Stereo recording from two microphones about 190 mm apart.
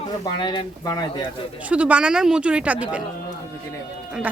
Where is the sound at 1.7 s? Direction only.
5° right (ahead or behind).